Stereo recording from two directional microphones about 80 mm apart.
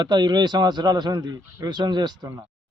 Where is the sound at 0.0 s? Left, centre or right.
Right.